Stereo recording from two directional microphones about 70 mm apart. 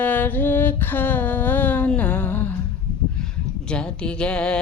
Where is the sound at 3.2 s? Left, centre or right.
Centre.